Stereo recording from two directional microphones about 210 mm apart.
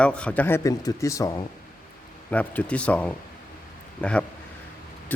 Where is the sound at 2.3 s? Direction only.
5° left (ahead or behind).